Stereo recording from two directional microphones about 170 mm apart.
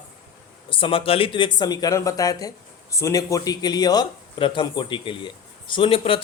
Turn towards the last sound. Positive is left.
turn(degrees=35)  # may be behind; listen again after turning